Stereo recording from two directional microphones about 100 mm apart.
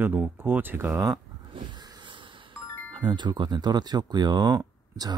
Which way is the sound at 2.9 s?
50° right (ahead or behind).